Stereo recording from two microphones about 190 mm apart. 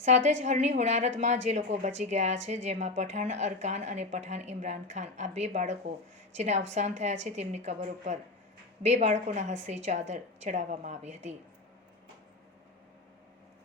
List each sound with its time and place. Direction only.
0.0 s a woman's voice: 40° right (ahead or behind)